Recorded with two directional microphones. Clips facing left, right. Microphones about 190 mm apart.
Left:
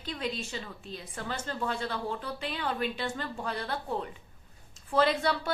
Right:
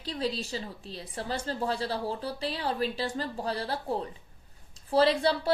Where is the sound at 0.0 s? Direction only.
35° right (ahead or behind).